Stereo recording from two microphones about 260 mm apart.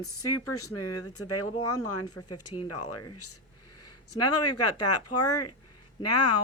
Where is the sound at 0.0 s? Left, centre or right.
Left.